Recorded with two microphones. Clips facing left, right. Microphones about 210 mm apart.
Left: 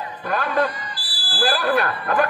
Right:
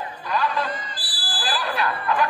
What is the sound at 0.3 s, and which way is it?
Speech, 55° left (ahead or behind).